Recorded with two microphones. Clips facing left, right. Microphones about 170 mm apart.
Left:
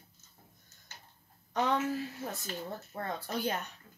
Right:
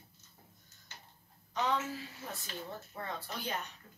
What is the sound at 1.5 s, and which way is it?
Speech, 50° left (ahead or behind).